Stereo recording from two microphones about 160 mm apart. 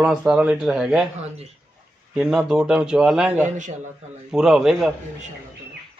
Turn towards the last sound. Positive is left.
turn(degrees=-5)  # may be behind; listen again after turning